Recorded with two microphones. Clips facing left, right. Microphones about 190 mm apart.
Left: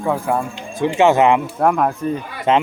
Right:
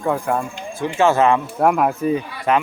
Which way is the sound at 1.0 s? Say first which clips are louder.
Left 2 dB; 20° left (ahead or behind).